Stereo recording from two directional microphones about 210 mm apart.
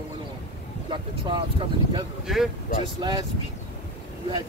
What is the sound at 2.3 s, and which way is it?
Speech, centre (ahead or behind).